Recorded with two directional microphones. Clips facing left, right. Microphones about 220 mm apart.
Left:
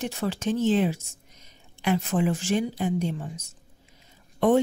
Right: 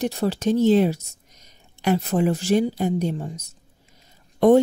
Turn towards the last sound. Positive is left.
turn(degrees=-40)  # may be behind; listen again after turning